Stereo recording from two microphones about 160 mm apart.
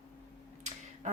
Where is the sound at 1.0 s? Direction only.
50° right (ahead or behind).